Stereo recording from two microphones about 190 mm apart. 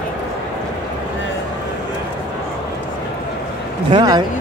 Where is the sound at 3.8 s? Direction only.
20° right (ahead or behind).